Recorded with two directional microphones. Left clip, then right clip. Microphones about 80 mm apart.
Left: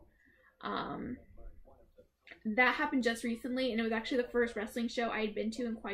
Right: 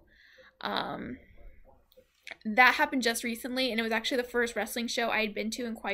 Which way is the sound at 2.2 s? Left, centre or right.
Right.